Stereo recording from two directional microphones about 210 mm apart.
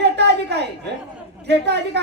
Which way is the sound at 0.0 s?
50° right (ahead or behind).